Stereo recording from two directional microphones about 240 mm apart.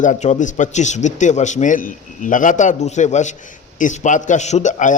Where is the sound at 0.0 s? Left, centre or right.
Left.